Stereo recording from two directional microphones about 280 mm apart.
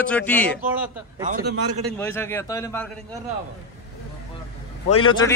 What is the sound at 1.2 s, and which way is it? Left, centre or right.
Speech, right.